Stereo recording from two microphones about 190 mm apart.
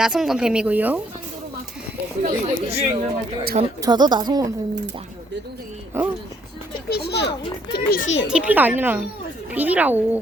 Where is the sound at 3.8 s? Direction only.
20° right (ahead or behind).